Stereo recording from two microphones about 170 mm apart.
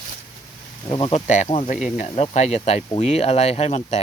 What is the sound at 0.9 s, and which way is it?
Speech, 30° left (ahead or behind).